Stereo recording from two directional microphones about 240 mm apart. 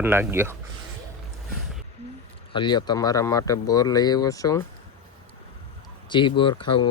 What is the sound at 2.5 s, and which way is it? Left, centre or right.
Speech, centre.